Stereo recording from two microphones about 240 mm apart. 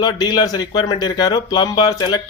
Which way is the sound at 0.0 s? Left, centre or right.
Centre.